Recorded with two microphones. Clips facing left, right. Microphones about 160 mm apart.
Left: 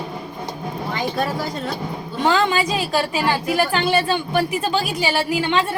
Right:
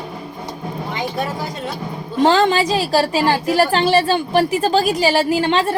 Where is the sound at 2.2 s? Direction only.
35° right (ahead or behind).